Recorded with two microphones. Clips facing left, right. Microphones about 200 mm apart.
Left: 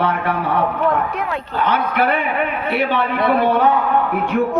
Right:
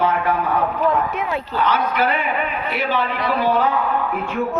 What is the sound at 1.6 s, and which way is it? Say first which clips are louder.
A man's voice: left 2 dB; 55° left (ahead or behind).